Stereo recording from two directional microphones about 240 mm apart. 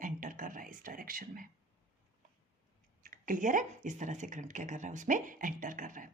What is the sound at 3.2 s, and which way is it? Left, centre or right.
Speech, right.